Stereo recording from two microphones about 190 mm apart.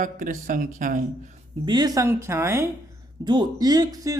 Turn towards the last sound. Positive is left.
turn(degrees=-20)  # may be behind; listen again after turning